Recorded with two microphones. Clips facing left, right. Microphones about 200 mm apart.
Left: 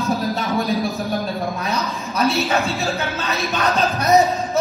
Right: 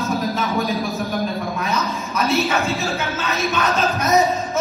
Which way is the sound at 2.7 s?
35° left (ahead or behind).